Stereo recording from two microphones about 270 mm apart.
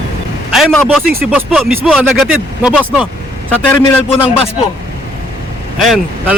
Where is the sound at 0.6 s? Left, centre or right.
Centre.